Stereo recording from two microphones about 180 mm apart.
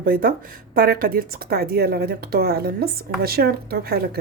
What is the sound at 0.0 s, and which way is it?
A woman's voice, 55° right (ahead or behind).